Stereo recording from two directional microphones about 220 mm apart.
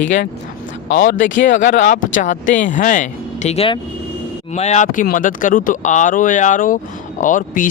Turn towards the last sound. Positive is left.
turn(degrees=35)  # may be behind; listen again after turning